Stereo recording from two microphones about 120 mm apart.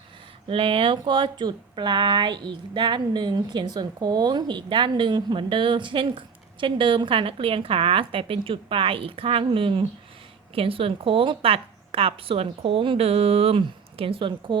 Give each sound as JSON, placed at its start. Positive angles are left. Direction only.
{"t": 0.4, "sound": "speech", "side_deg": -50}